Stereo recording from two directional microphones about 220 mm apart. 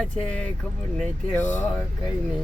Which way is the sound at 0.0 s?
5° left (ahead or behind).